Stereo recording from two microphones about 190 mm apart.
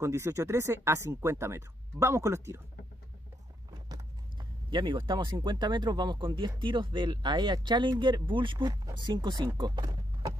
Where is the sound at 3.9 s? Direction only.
25° right (ahead or behind).